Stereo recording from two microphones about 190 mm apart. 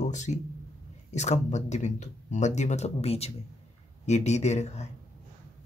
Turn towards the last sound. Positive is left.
turn(degrees=35)  # may be behind; listen again after turning